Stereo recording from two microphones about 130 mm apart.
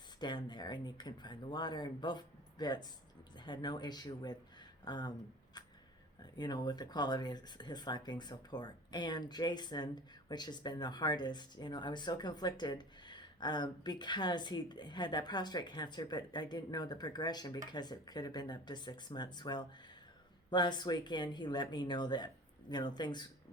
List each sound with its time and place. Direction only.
0.2 s speech: 35° left (ahead or behind)
6.3 s speech: 35° left (ahead or behind)